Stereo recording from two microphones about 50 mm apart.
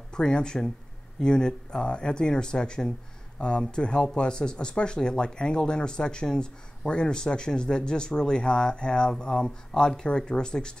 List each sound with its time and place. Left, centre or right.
0.1 s speech: centre